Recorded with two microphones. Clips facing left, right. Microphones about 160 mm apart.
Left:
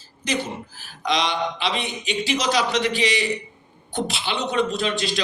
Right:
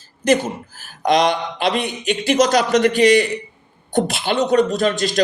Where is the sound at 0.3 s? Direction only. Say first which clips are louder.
Right 9 dB; 50° right (ahead or behind).